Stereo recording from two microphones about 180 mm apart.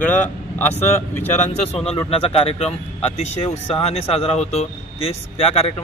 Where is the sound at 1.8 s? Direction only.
35° left (ahead or behind).